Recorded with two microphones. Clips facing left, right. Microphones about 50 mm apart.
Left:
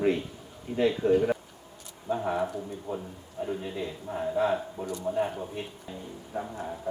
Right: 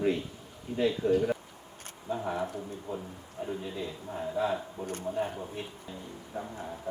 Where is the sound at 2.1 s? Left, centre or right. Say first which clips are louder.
Left 4 dB; left.